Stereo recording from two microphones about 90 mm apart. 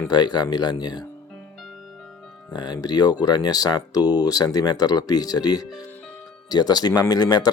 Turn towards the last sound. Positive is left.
turn(degrees=50)  # may be behind; listen again after turning